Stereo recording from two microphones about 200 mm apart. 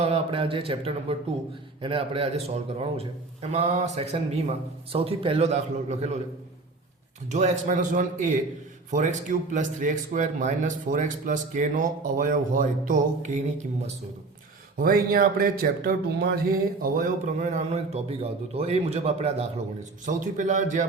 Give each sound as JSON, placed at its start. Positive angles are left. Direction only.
{"t": 0.0, "sound": "speech", "side_deg": -30}
{"t": 7.3, "sound": "speech", "side_deg": -35}
{"t": 14.8, "sound": "speech", "side_deg": -45}